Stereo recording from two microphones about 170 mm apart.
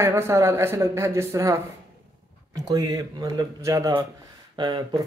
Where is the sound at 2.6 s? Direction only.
20° right (ahead or behind).